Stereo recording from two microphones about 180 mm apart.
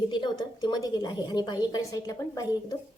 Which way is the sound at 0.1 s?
25° left (ahead or behind).